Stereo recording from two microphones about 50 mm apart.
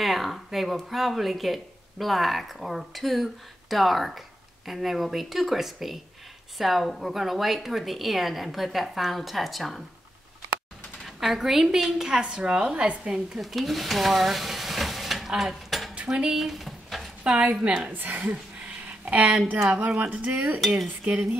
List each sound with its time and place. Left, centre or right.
0.0 s speech: centre
11.1 s a woman's voice: centre; by 13.2 s right
13.3 s speech: centre
16.1 s a woman's voice: centre
16.4 s a sound: centre
17.2 s a woman's voice: right
18.9 s a sound: right
20.0 s speech: right